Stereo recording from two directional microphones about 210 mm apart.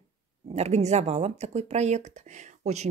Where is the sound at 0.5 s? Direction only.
30° right (ahead or behind).